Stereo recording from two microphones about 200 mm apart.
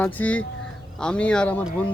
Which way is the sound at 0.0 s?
5° left (ahead or behind).